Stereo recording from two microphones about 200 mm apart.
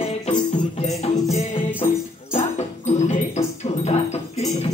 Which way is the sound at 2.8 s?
30° left (ahead or behind).